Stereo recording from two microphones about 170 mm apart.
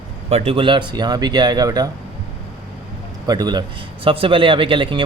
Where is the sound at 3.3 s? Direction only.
25° right (ahead or behind).